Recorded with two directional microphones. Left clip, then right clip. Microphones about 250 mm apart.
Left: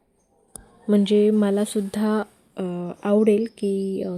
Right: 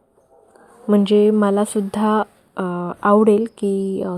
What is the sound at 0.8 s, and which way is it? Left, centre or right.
Speech, centre.